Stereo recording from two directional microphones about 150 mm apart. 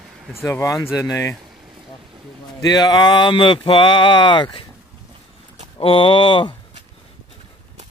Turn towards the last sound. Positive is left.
turn(degrees=35)  # may be behind; listen again after turning